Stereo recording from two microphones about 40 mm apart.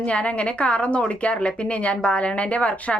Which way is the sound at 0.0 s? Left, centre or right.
Left.